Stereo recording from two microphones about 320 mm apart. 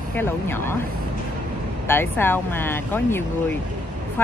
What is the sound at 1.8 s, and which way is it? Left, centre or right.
Speech, centre.